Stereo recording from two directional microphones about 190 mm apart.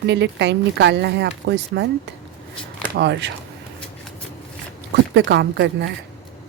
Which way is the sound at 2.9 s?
65° right (ahead or behind).